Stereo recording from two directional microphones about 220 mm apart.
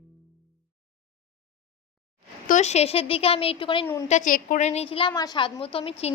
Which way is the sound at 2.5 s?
30° left (ahead or behind).